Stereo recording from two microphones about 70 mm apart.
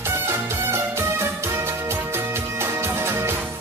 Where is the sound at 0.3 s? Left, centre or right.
Right.